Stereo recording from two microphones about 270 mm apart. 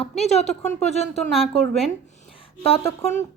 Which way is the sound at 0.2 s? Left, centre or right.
Left.